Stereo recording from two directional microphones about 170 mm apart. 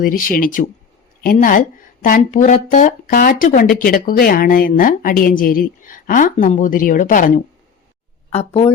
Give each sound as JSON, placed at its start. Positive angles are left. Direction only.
{"t": 0.0, "sound": "speech", "side_deg": 55}
{"t": 8.3, "sound": "speech", "side_deg": 35}